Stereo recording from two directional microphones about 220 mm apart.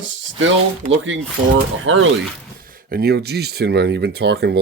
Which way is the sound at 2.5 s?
40° right (ahead or behind).